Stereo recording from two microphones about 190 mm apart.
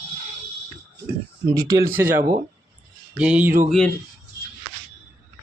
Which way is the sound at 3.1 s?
5° right (ahead or behind).